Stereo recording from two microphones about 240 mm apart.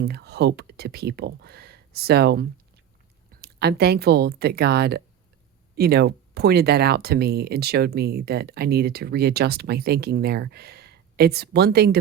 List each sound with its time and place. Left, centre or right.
0.0 s speech: right